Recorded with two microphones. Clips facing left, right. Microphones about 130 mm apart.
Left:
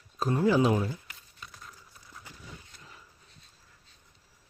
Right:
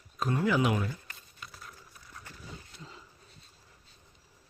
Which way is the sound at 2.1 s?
15° left (ahead or behind).